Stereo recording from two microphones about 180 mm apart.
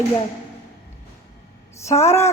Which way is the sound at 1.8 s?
15° left (ahead or behind).